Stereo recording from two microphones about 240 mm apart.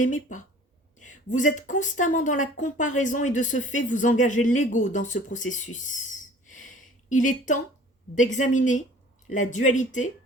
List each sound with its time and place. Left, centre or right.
0.0 s a woman's voice: left
5.7 s a sound: left
7.1 s a woman's voice: left